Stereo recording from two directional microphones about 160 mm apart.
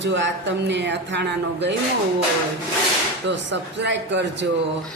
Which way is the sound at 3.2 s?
90° right.